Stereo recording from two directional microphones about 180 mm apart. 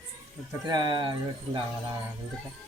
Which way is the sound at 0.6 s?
25° right (ahead or behind).